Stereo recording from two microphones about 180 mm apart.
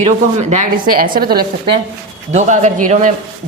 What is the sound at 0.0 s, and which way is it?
Speech, 40° right (ahead or behind).